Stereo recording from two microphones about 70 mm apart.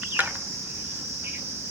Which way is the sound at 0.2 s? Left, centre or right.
Right.